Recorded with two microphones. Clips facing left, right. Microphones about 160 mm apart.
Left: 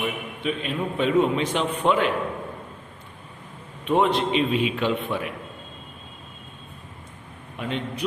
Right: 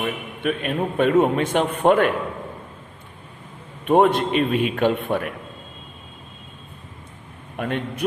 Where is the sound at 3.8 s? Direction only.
50° right (ahead or behind).